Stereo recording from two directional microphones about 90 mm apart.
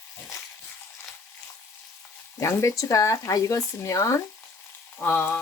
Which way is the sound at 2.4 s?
35° left (ahead or behind).